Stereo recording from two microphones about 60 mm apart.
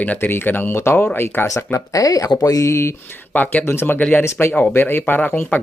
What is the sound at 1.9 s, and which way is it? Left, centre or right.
Speech, left.